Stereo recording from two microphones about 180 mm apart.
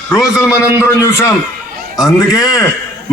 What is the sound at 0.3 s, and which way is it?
Speech, 15° left (ahead or behind).